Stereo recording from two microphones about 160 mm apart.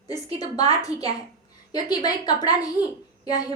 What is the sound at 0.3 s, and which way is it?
A woman's voice, 25° left (ahead or behind).